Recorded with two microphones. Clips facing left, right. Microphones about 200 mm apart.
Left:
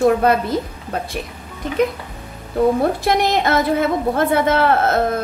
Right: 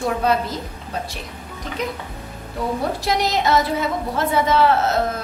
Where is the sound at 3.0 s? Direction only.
55° left (ahead or behind).